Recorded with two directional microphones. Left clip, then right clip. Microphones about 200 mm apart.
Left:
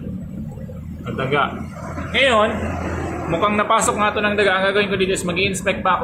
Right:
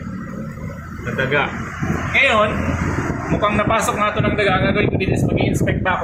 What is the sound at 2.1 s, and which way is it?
A man's voice, 15° left (ahead or behind).